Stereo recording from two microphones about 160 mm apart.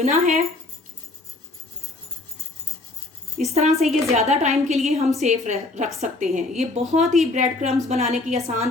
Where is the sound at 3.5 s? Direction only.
40° right (ahead or behind).